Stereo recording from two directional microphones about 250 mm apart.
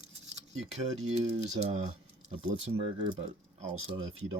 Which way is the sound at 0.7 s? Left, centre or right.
Right.